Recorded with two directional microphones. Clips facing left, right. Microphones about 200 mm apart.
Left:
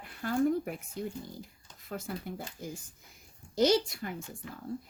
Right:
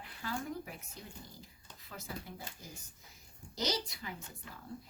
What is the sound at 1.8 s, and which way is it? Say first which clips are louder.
Speech: left 8 dB; 55° left (ahead or behind).